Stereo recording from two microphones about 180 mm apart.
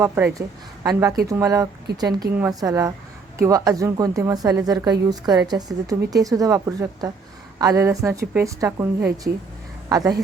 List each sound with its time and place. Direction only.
0.0 s a woman's voice: 15° right (ahead or behind)